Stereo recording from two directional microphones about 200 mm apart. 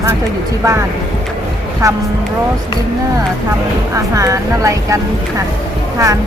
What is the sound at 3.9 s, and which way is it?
Speech, 15° right (ahead or behind).